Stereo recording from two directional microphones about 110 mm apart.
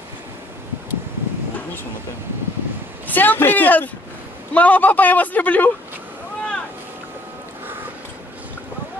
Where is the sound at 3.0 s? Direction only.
15° left (ahead or behind).